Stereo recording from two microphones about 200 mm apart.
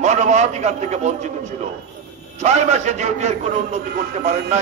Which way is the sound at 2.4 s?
35° right (ahead or behind).